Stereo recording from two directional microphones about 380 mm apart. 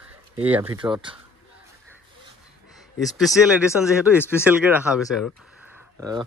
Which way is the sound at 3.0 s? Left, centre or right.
Centre.